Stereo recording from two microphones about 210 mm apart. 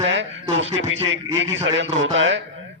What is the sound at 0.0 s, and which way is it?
A man's voice, 65° right (ahead or behind).